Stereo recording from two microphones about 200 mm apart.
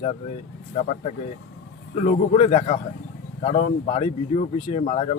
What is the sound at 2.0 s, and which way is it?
Speech, 30° left (ahead or behind).